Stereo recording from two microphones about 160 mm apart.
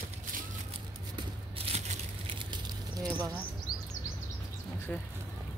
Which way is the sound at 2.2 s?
30° right (ahead or behind).